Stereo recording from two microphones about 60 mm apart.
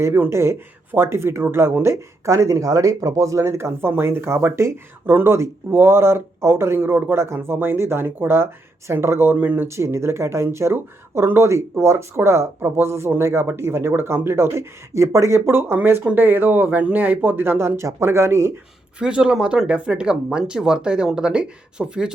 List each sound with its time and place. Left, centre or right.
0.3 s speech: right
1.8 s speech: right
3.4 s speech: right
9.3 s speech: right
9.6 s speech: right
18.9 s speech: centre